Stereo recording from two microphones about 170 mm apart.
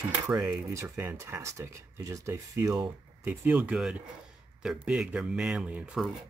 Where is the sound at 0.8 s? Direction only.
15° right (ahead or behind).